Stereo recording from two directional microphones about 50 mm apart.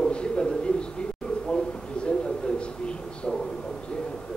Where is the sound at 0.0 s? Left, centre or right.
Centre.